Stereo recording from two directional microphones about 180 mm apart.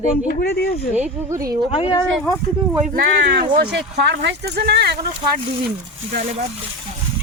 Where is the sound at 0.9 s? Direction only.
10° right (ahead or behind).